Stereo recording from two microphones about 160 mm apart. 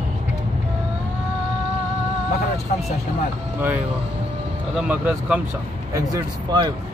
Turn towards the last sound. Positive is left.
turn(degrees=-25)  # may be behind; listen again after turning